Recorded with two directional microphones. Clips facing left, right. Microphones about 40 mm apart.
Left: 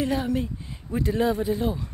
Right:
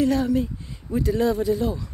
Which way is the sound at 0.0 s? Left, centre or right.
Left.